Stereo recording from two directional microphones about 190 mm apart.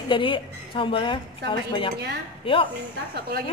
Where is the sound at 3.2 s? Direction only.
55° right (ahead or behind).